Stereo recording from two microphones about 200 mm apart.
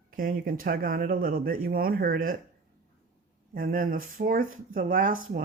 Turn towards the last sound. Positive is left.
turn(degrees=-45)  # may be behind; listen again after turning